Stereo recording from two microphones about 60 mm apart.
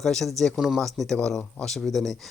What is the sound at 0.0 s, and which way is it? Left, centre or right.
A man's voice, centre.